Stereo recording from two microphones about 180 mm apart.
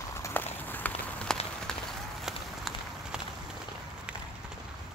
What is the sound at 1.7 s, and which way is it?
Run, 5° left (ahead or behind).